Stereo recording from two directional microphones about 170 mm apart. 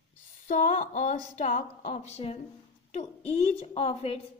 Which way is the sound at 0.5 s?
50° left (ahead or behind).